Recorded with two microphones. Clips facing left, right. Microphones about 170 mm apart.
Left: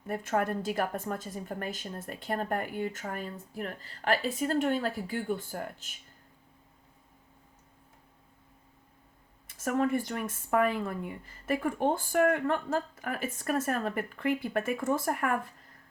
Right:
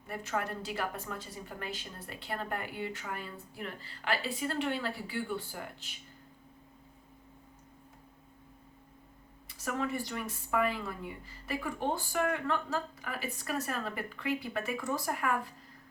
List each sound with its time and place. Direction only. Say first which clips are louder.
0.1 s speech: left 6 dB; 50° left (ahead or behind)
9.5 s speech: left 6 dB; 50° left (ahead or behind)